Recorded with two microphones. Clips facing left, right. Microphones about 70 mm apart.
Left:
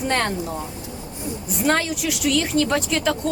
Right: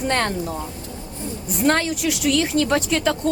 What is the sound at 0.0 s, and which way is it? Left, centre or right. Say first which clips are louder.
A woman's voice: right 1 dB; centre.